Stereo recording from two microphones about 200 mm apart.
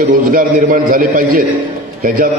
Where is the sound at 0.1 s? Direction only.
45° right (ahead or behind).